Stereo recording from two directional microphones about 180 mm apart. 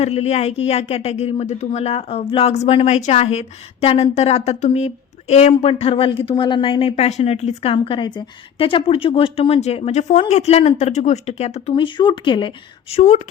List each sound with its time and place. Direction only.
0.0 s a woman's voice: 35° left (ahead or behind)
12.9 s a woman's voice: 40° left (ahead or behind)